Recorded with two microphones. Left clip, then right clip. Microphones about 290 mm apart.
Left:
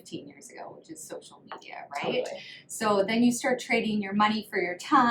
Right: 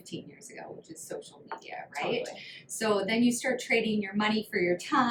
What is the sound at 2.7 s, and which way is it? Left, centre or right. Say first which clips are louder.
A woman's voice: left 3 dB; centre.